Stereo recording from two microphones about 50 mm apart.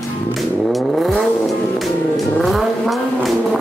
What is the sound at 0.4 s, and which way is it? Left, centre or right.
Vehicle, centre.